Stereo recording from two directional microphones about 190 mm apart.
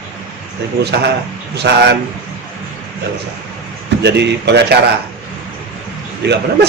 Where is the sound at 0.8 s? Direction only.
60° right (ahead or behind).